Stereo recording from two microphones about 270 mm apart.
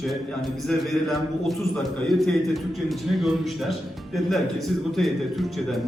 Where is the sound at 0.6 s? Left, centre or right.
Centre.